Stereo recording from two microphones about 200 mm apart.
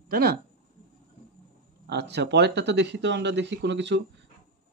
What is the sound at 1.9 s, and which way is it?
Speech, 55° right (ahead or behind).